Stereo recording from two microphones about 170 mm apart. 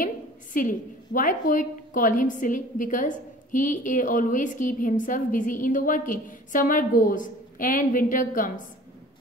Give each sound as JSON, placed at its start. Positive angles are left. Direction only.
{"t": 0.0, "sound": "a woman's voice", "side_deg": 50}